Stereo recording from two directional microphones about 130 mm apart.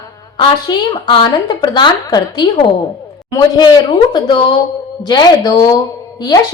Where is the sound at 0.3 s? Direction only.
35° left (ahead or behind).